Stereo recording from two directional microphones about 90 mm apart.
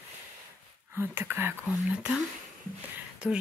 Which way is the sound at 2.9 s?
15° right (ahead or behind).